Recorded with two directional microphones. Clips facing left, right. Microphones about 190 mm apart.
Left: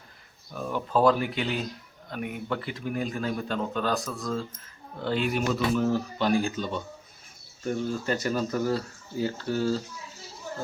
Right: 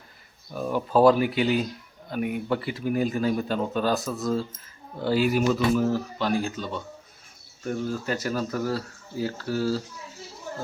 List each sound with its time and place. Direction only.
0.5 s a man's voice: 10° right (ahead or behind)